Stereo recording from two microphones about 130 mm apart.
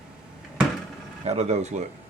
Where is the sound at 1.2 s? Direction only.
55° right (ahead or behind).